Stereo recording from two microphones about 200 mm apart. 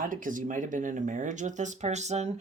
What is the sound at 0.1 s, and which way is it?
Speech, 40° right (ahead or behind).